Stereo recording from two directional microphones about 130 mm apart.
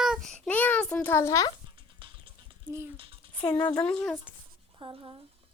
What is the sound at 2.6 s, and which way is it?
Speech, 20° right (ahead or behind).